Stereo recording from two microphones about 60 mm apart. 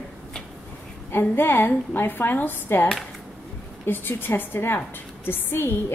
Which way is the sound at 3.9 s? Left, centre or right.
Left.